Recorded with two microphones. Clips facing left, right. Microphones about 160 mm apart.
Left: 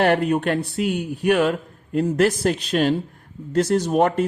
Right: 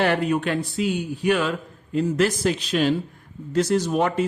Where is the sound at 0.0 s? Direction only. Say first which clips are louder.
Left 3 dB; 50° left (ahead or behind).